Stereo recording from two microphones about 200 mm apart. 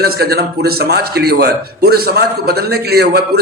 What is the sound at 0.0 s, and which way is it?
A man's voice, 50° right (ahead or behind).